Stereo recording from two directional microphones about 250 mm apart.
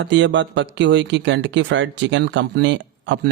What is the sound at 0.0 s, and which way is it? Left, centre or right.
Speech, right.